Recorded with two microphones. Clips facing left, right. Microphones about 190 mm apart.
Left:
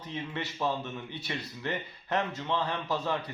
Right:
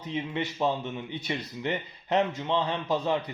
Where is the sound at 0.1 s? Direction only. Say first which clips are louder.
Right 5 dB; 20° right (ahead or behind).